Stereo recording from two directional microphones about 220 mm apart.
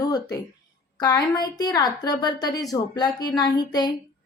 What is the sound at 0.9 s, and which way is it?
A woman's voice, 15° left (ahead or behind).